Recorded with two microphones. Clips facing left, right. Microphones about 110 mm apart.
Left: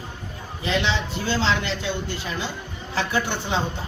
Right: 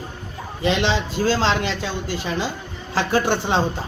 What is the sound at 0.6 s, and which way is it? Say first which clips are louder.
A man's voice: right 4 dB; 85° right.